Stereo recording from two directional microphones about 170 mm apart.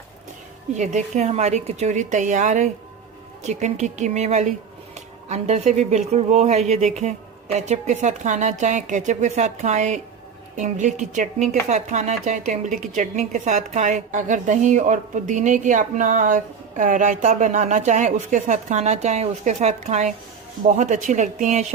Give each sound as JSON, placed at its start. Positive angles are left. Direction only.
{"t": 0.8, "sound": "a woman's voice", "side_deg": -45}